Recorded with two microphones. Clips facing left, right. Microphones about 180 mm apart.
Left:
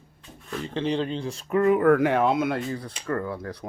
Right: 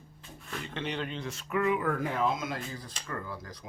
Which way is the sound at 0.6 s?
30° left (ahead or behind).